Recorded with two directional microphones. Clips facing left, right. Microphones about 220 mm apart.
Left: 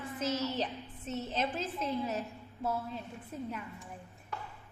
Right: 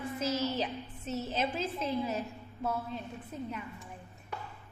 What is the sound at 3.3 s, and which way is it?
Speech, 5° left (ahead or behind).